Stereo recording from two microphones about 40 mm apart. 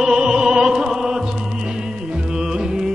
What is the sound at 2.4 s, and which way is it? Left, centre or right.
Music, centre.